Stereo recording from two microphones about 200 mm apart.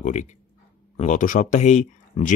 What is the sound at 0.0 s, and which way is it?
Speech, 35° left (ahead or behind).